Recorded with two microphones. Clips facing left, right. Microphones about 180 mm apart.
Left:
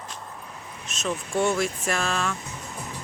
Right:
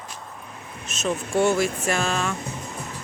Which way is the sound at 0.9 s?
Centre (ahead or behind).